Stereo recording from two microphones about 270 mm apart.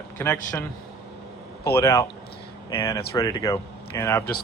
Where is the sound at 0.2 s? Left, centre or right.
Centre.